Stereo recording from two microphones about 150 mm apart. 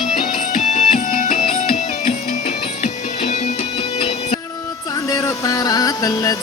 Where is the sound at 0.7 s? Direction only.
50° left (ahead or behind).